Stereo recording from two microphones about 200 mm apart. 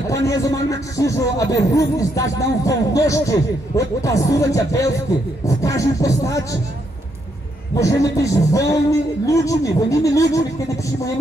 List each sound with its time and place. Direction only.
0.1 s speech: 15° left (ahead or behind)
7.8 s speech: 15° left (ahead or behind)